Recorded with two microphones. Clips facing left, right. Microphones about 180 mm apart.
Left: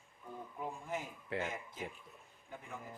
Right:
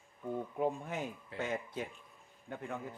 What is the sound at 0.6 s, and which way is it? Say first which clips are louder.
A man's voice: right 5 dB; 65° right (ahead or behind).